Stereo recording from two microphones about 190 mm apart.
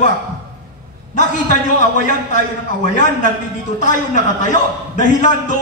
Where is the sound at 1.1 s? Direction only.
40° left (ahead or behind).